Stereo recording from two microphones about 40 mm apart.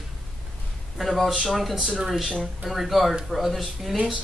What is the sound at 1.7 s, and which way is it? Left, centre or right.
Speech, right.